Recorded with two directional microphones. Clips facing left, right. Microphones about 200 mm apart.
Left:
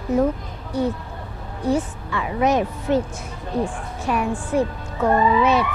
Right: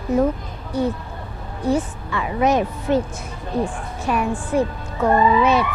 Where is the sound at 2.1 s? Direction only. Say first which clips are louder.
Right 1 dB; 20° right (ahead or behind).